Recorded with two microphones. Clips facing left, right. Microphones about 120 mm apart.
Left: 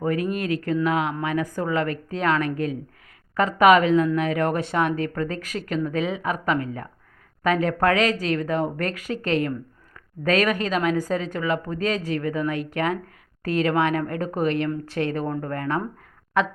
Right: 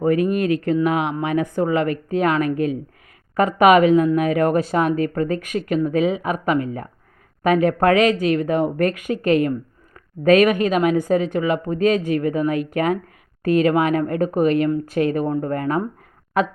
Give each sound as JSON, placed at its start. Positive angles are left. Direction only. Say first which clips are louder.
{"t": 0.0, "sound": "a woman's voice", "louder": "right 6 dB", "side_deg": -20}
{"t": 11.9, "sound": "speech", "louder": "right 6 dB", "side_deg": 30}
{"t": 12.2, "sound": "speech", "louder": "right 5 dB", "side_deg": -20}